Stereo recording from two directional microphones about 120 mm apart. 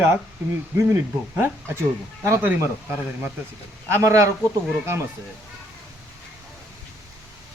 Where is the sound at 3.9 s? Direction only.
25° right (ahead or behind).